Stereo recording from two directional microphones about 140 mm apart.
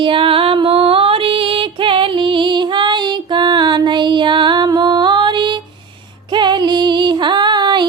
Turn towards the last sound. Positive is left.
turn(degrees=-30)  # may be behind; listen again after turning